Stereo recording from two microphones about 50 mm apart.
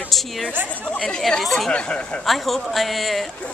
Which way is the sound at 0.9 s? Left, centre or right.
Centre.